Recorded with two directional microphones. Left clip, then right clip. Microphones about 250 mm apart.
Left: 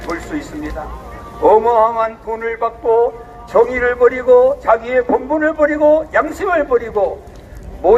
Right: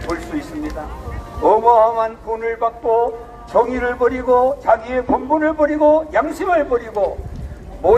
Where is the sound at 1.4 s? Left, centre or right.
Left.